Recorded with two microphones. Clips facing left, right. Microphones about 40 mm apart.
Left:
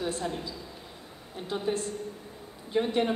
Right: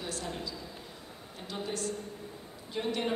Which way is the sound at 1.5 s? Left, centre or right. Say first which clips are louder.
Left 5 dB; centre.